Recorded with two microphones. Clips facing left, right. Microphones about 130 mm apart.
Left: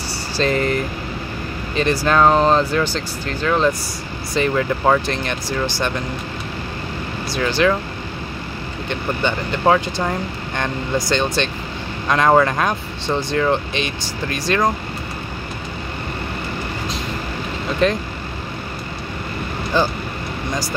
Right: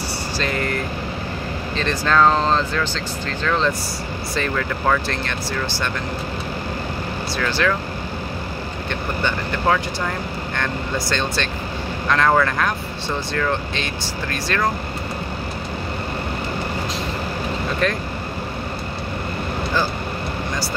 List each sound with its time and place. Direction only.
1.8 s speech: 15° left (ahead or behind)
4.4 s speech: 25° left (ahead or behind)
7.3 s speech: 20° left (ahead or behind)
9.2 s speech: 20° left (ahead or behind)
17.8 s speech: 20° left (ahead or behind)